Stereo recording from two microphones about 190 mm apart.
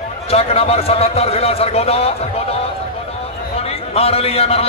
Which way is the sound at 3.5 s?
30° left (ahead or behind).